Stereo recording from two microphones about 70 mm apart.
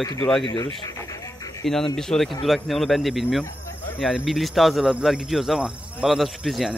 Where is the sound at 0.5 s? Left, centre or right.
Left.